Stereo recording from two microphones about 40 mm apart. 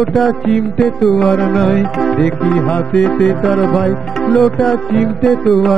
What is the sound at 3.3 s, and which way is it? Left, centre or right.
Music, centre.